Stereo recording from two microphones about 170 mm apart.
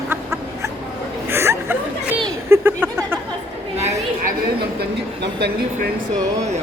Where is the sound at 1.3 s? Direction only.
15° right (ahead or behind).